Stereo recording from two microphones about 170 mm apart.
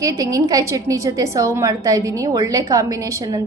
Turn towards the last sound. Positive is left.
turn(degrees=-20)  # may be behind; listen again after turning